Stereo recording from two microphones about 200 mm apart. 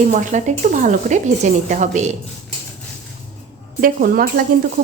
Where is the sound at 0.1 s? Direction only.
40° right (ahead or behind).